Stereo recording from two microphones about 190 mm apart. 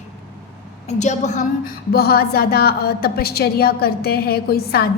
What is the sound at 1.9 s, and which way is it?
A woman's voice, 55° left (ahead or behind).